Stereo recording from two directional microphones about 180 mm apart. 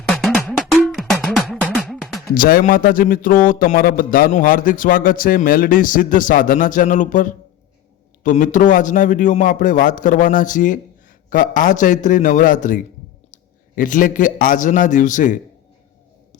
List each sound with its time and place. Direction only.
0.2 s cowbell: centre (ahead or behind)
2.3 s a man's voice: 50° left (ahead or behind)